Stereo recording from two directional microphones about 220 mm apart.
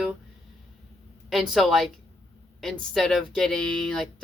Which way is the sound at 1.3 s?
Centre (ahead or behind).